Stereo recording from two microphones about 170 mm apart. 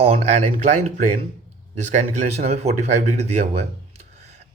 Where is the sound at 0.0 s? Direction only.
40° right (ahead or behind).